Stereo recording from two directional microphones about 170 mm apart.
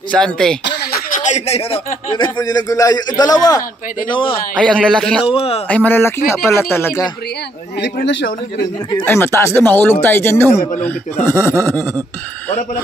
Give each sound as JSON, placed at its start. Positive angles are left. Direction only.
{"t": 0.1, "sound": "speech", "side_deg": 5}
{"t": 1.1, "sound": "a man's voice", "side_deg": 45}
{"t": 4.8, "sound": "speech", "side_deg": 5}
{"t": 5.2, "sound": "a man's voice", "side_deg": 35}
{"t": 5.7, "sound": "speech", "side_deg": 10}
{"t": 7.8, "sound": "speech", "side_deg": 90}
{"t": 9.0, "sound": "speech", "side_deg": 15}
{"t": 11.7, "sound": "a sound", "side_deg": -20}
{"t": 12.4, "sound": "speech", "side_deg": 15}